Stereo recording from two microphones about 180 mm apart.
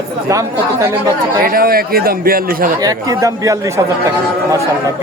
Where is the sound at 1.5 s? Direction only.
55° right (ahead or behind).